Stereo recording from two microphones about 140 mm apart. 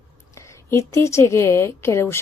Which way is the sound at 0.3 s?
20° left (ahead or behind).